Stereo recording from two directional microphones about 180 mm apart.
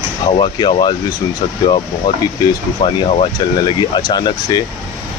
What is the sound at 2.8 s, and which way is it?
Speech, 30° left (ahead or behind).